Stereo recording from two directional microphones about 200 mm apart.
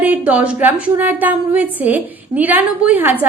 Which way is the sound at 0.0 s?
5° right (ahead or behind).